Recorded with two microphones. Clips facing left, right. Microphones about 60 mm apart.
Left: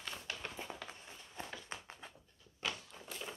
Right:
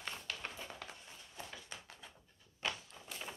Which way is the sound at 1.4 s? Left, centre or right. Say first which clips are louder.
Left 3 dB; left.